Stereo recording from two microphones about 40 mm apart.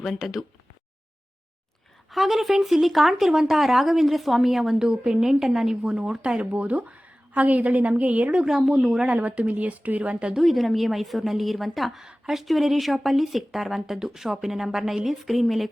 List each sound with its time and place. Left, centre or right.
0.0 s speech: centre
2.0 s speech: centre
6.0 s speech: right
6.5 s a woman's voice: right
8.4 s speech: centre
9.0 s a woman's voice: right
10.0 s speech: right
10.3 s speech: centre